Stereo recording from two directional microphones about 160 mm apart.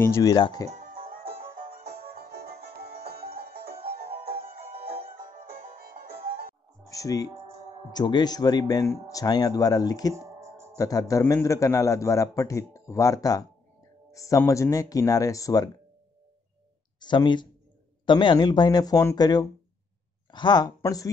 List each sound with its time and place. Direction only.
0.0 s a man's voice: 20° left (ahead or behind)
0.7 s music: 50° right (ahead or behind)
1.8 s music: 40° right (ahead or behind)
2.8 s music: 75° right (ahead or behind)
4.3 s music: 35° right (ahead or behind)
5.0 s music: 60° right (ahead or behind)
6.9 s music: 20° left (ahead or behind)
7.9 s a man's voice: 25° left (ahead or behind)
10.1 s music: 15° right (ahead or behind)
10.8 s a man's voice: 20° left (ahead or behind)
17.0 s a man's voice: 30° left (ahead or behind)